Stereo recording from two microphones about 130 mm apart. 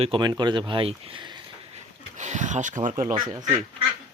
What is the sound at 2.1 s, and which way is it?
Speech, 65° right (ahead or behind).